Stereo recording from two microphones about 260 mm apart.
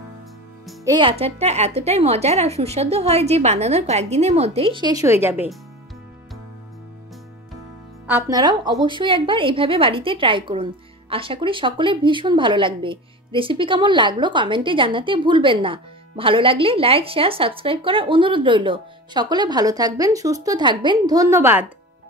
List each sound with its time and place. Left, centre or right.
0.8 s a woman's voice: centre
8.1 s a woman's voice: centre